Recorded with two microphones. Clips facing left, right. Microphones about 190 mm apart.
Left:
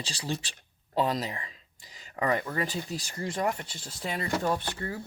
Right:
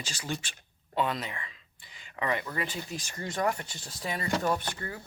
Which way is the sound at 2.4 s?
35° left (ahead or behind).